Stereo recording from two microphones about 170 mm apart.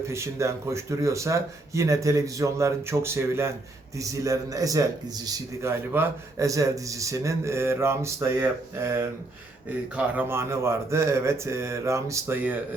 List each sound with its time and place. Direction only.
0.1 s a man's voice: 15° right (ahead or behind)